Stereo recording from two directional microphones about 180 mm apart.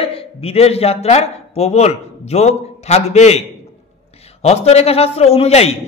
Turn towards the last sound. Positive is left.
turn(degrees=35)  # may be behind; listen again after turning